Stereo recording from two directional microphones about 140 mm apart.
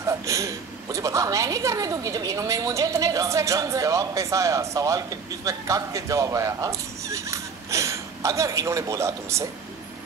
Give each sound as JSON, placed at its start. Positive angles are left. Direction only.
{"t": 0.0, "sound": "a woman's voice", "side_deg": -20}